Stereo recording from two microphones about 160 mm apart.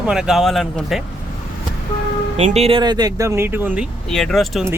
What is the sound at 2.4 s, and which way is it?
Speech, 45° right (ahead or behind).